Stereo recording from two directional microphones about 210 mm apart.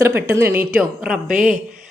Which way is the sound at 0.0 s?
10° right (ahead or behind).